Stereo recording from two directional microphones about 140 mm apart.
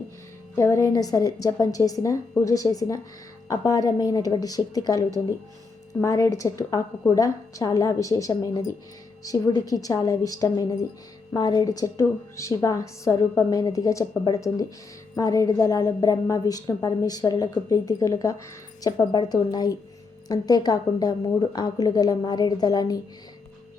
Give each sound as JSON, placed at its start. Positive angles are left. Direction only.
{"t": 0.5, "sound": "a woman's voice", "side_deg": 20}